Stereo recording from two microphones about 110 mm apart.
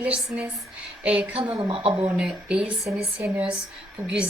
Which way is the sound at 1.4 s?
50° right (ahead or behind).